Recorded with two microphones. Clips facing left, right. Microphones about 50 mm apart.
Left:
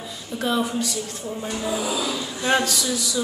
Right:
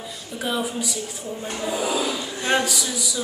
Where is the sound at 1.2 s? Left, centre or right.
Centre.